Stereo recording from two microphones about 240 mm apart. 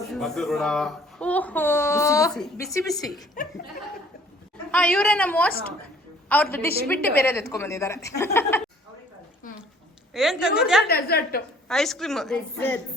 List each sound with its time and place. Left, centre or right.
0.1 s a woman's voice: centre
4.7 s a woman's voice: centre
10.1 s speech: centre
10.8 s a woman's voice: left
11.7 s speech: centre